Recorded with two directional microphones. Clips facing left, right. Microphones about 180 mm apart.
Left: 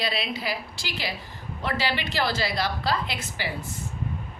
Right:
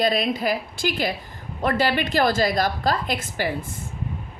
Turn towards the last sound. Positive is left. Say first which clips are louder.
# right 6 dB
turn(degrees=-50)  # may be behind; listen again after turning